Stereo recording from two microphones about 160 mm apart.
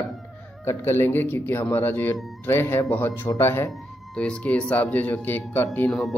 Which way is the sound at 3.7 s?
5° left (ahead or behind).